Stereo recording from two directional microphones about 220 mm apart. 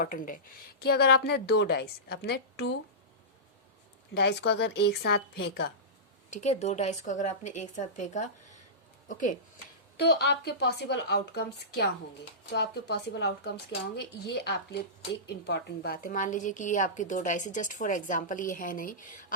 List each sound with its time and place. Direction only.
0.0 s a woman's voice: 40° left (ahead or behind)
4.1 s a woman's voice: 50° left (ahead or behind)
6.3 s speech: 30° left (ahead or behind)
10.0 s a woman's voice: 50° left (ahead or behind)